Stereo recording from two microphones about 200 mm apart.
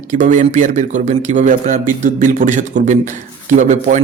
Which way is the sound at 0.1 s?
40° right (ahead or behind).